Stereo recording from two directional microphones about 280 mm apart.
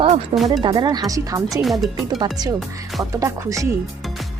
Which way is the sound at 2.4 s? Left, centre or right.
Centre.